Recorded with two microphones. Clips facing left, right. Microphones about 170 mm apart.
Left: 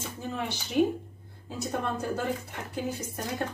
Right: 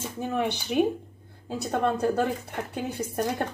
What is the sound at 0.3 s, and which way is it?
Speech, 65° right (ahead or behind).